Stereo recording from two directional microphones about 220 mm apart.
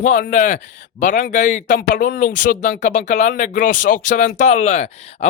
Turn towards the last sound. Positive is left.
turn(degrees=30)  # may be behind; listen again after turning